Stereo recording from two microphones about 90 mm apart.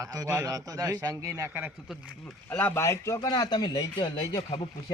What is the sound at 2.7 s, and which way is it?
Speech, 30° left (ahead or behind).